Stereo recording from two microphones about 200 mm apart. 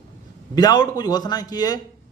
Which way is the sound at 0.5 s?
20° left (ahead or behind).